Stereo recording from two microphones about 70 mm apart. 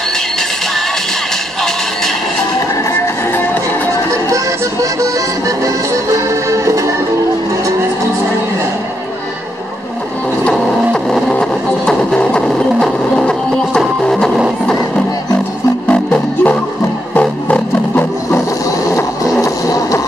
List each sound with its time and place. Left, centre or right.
6.1 s music: right
10.5 s music: centre
15.9 s music: centre
19.4 s a sound: left